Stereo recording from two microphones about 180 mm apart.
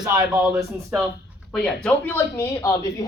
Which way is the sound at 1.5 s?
5° left (ahead or behind).